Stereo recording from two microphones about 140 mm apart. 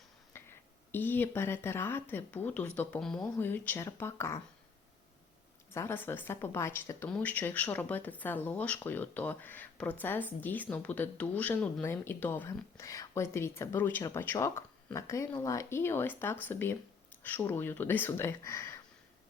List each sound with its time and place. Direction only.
0.3 s a sound: 15° left (ahead or behind)
0.9 s speech: 15° left (ahead or behind)
5.7 s speech: 15° left (ahead or behind)